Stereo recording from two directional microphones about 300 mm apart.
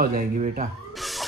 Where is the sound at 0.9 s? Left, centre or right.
Centre.